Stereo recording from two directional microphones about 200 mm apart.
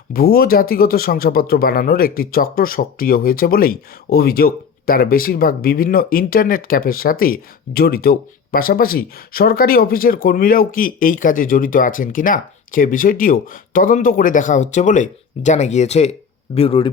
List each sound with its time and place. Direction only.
0.1 s speech: 50° left (ahead or behind); by 16.9 s 25° left (ahead or behind)